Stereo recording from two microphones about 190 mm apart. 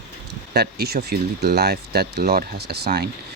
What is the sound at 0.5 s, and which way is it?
Speech, 55° right (ahead or behind).